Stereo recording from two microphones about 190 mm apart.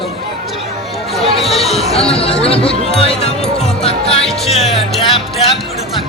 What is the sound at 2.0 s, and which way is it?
Speech, 30° left (ahead or behind).